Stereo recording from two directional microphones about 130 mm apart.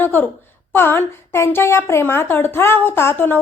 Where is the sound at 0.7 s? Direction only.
15° left (ahead or behind).